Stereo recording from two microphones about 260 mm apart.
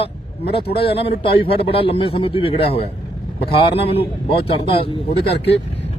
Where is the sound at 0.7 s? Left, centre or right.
Left.